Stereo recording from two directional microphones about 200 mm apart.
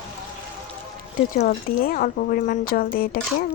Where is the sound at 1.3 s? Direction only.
50° left (ahead or behind).